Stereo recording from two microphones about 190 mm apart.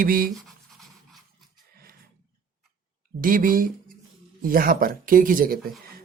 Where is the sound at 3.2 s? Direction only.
45° right (ahead or behind).